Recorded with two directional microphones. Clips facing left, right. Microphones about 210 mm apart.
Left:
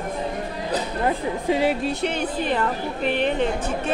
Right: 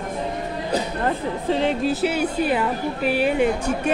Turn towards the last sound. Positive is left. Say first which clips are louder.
# right 3 dB
turn(degrees=-10)  # may be behind; listen again after turning